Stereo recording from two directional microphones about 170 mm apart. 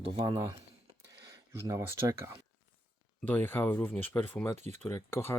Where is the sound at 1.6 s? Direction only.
15° right (ahead or behind).